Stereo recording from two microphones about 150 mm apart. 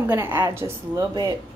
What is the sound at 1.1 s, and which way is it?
Dishes, 30° right (ahead or behind).